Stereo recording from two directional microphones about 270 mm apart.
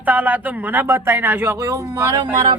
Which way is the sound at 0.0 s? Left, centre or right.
Centre.